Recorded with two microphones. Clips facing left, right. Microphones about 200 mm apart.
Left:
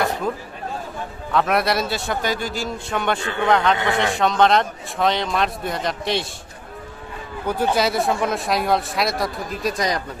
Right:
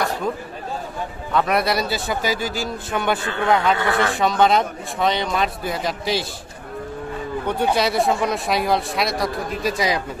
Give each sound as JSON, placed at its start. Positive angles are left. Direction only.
{"t": 1.3, "sound": "speech", "side_deg": 0}
{"t": 3.7, "sound": "a man's voice", "side_deg": 20}
{"t": 4.1, "sound": "speech", "side_deg": 0}
{"t": 7.4, "sound": "speech", "side_deg": 0}